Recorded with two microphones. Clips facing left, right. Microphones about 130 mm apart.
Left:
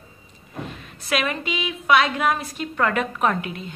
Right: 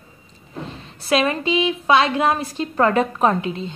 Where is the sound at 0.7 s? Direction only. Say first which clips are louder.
Right 6 dB; 30° right (ahead or behind).